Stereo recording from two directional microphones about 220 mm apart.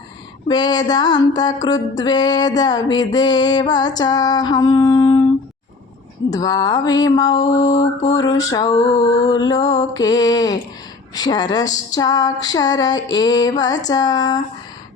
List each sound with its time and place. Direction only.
0.4 s a sound: 20° left (ahead or behind)
1.6 s mantra: 20° left (ahead or behind)
6.3 s mantra: 15° left (ahead or behind)